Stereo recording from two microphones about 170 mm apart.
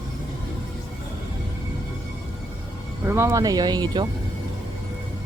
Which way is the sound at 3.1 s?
15° right (ahead or behind).